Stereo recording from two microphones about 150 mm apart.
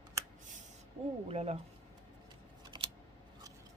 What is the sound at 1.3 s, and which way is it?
Speech, 45° right (ahead or behind).